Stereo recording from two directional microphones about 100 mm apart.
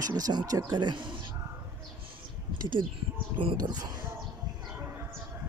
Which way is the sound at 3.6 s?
40° right (ahead or behind).